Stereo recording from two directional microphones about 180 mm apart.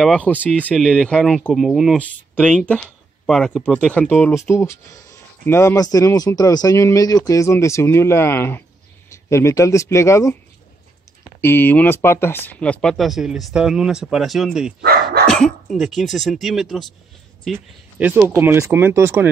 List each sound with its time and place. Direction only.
0.0 s speech: 5° left (ahead or behind)
11.4 s speech: 10° left (ahead or behind)
14.8 s dog: 60° right (ahead or behind)
15.2 s speech: 5° left (ahead or behind); by 19.2 s 15° right (ahead or behind)